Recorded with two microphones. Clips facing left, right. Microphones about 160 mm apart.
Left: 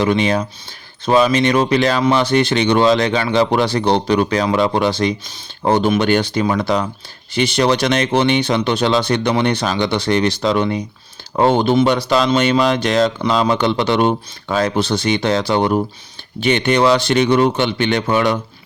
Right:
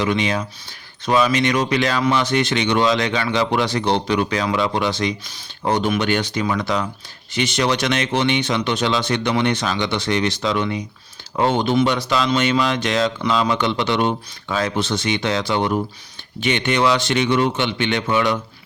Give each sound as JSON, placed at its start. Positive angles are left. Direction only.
{"t": 0.0, "sound": "speech", "side_deg": 35}